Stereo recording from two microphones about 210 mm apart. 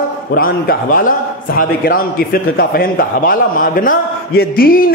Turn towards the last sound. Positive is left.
turn(degrees=45)  # may be behind; listen again after turning